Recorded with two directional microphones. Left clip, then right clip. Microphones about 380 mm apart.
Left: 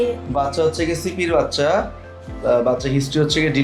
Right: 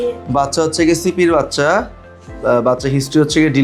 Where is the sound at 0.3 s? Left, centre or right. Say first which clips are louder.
Right 4 dB; right.